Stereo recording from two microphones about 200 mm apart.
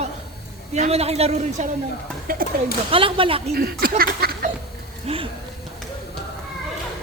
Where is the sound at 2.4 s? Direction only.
45° right (ahead or behind).